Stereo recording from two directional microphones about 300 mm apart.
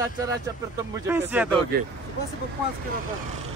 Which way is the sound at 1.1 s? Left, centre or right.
Centre.